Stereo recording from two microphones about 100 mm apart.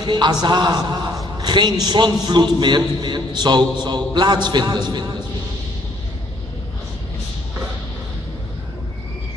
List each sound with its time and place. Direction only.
0.0 s a man's voice: 45° right (ahead or behind)